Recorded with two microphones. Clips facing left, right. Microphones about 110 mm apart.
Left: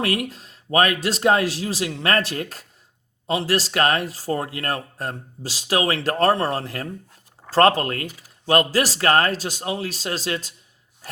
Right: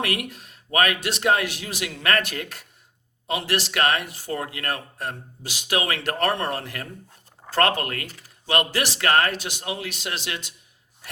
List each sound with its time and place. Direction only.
0.0 s speech: 35° left (ahead or behind)